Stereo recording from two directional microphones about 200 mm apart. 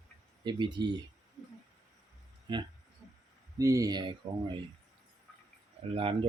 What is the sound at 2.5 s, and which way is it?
Speech, 25° right (ahead or behind).